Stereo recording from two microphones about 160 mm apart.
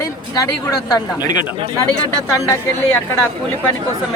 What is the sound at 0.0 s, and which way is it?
Speech, 20° left (ahead or behind).